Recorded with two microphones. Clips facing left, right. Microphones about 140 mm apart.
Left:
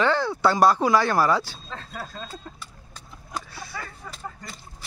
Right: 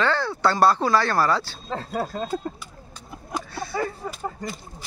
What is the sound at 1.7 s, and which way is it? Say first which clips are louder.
Speech: right 9 dB; 40° right (ahead or behind).